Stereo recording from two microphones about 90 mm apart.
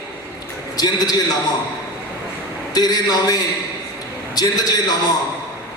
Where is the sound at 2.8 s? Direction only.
50° left (ahead or behind).